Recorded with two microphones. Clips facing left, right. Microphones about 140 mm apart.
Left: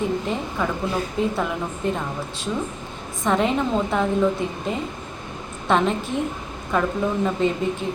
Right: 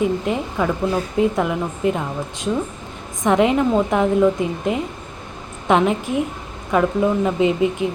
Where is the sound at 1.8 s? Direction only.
10° right (ahead or behind).